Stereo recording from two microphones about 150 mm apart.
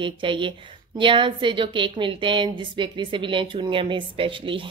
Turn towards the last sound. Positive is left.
turn(degrees=-35)  # may be behind; listen again after turning